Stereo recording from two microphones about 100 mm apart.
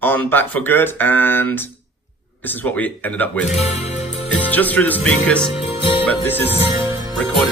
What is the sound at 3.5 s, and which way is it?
Speech, 90° left.